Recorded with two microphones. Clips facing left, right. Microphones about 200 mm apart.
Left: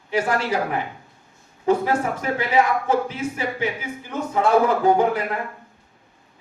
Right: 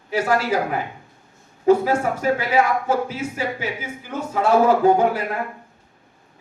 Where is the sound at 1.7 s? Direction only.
10° right (ahead or behind).